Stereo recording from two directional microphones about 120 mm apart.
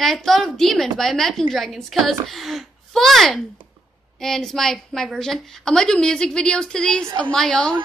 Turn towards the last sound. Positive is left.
turn(degrees=5)  # may be behind; listen again after turning